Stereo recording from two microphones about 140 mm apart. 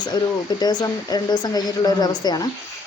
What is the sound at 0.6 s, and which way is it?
Speech, 30° left (ahead or behind).